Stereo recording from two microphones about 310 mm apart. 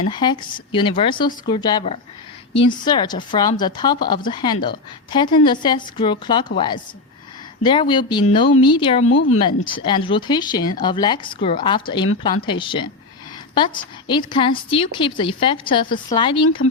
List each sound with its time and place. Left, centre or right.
0.1 s speech: centre
7.6 s speech: centre
9.0 s speech: left
9.4 s speech: centre
14.1 s speech: centre